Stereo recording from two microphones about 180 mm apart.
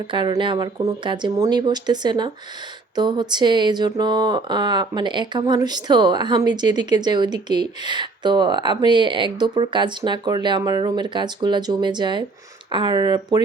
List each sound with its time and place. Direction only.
0.1 s speech: 25° right (ahead or behind)